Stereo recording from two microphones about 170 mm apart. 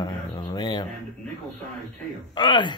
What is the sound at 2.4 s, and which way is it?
Speech, 25° left (ahead or behind).